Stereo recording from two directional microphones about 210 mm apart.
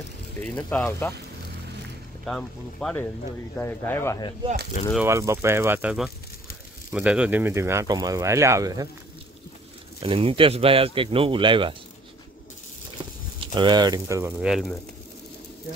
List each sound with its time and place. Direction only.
0.6 s speech: 5° left (ahead or behind)
2.2 s speech: 5° left (ahead or behind)
5.0 s speech: 15° right (ahead or behind)
10.0 s speech: 25° right (ahead or behind)
13.4 s speech: 20° right (ahead or behind)
14.4 s speech: centre (ahead or behind)